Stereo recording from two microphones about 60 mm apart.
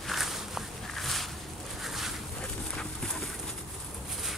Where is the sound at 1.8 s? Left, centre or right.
Centre.